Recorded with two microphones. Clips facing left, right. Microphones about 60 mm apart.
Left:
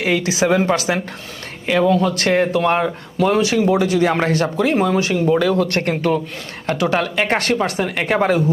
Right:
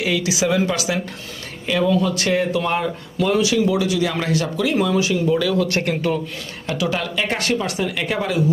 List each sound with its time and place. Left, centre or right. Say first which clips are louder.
0.0 s speech: left 3 dB; left